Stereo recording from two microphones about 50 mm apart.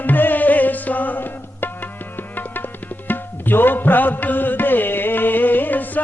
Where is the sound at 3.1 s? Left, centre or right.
Left.